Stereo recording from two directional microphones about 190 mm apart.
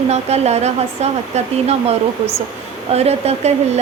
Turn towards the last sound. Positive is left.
turn(degrees=-35)  # may be behind; listen again after turning